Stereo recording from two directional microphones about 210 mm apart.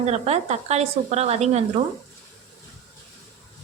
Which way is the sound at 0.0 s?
30° right (ahead or behind).